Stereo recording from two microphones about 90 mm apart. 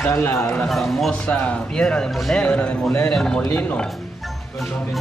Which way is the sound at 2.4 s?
15° left (ahead or behind).